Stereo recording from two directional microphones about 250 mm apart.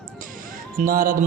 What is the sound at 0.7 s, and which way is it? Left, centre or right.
Speech, right.